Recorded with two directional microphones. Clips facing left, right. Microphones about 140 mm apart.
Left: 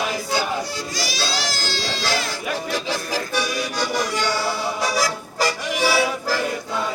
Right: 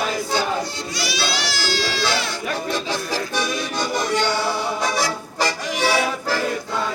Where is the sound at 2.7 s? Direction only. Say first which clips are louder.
Right 1 dB; 10° left (ahead or behind).